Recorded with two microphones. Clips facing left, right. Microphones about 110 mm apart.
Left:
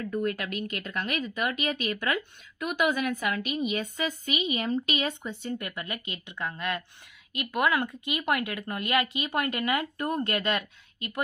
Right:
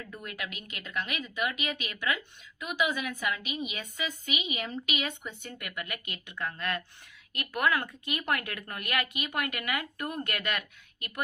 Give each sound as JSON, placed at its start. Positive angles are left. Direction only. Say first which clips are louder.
{"t": 0.1, "sound": "speech", "louder": "left 11 dB", "side_deg": 45}